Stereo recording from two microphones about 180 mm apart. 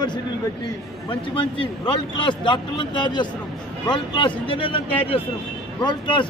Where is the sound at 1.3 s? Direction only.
30° left (ahead or behind).